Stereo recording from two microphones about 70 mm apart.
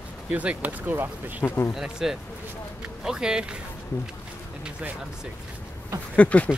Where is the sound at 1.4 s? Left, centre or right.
Left.